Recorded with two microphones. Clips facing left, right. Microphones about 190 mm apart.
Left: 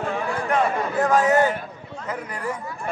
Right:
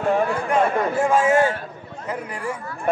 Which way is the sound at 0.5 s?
10° right (ahead or behind).